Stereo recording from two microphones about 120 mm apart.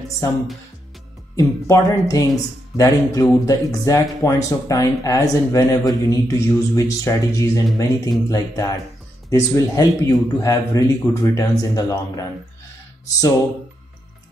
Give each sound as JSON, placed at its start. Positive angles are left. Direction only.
{"t": 1.3, "sound": "speech", "side_deg": 25}